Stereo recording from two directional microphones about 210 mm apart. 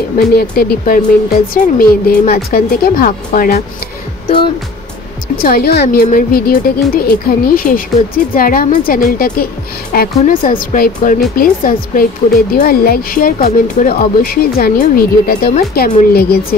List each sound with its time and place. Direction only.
0.4 s a woman's voice: 45° left (ahead or behind)
5.4 s a woman's voice: 50° left (ahead or behind)